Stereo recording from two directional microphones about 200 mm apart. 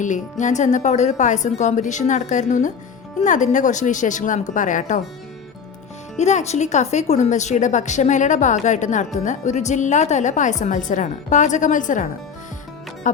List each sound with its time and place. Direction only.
0.0 s a woman's voice: 40° left (ahead or behind)
6.1 s a woman's voice: 35° left (ahead or behind)